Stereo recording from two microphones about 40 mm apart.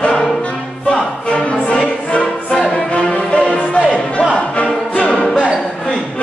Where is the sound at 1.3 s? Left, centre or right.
Left.